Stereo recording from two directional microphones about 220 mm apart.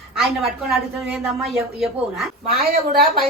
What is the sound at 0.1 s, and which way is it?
A woman's voice, centre (ahead or behind).